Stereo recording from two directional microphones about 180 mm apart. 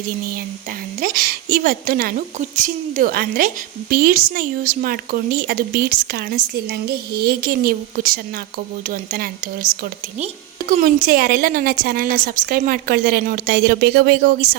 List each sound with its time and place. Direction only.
1.0 s a woman's voice: 55° right (ahead or behind)
10.7 s a woman's voice: 50° right (ahead or behind)